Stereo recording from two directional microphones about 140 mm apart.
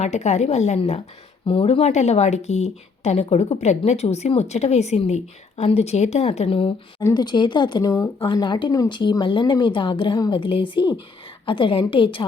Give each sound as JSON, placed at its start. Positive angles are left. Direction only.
{"t": 0.0, "sound": "speech", "side_deg": 55}
{"t": 1.5, "sound": "speech", "side_deg": 40}
{"t": 7.0, "sound": "speech", "side_deg": 30}
{"t": 8.2, "sound": "a woman's voice", "side_deg": 35}